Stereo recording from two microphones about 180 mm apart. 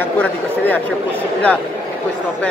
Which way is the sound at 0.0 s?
10° left (ahead or behind).